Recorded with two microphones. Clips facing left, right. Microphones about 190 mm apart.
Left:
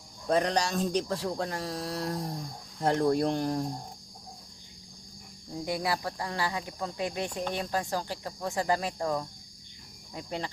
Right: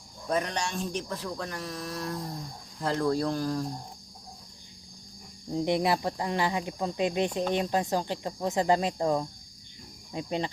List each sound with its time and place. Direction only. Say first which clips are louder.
0.3 s speech: left 3 dB; 35° left (ahead or behind)
5.5 s speech: right 5 dB; 25° right (ahead or behind)
10.1 s cricket: right 5 dB; 20° right (ahead or behind)